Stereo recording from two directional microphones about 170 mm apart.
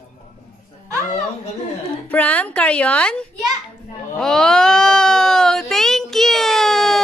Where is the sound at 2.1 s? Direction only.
10° left (ahead or behind).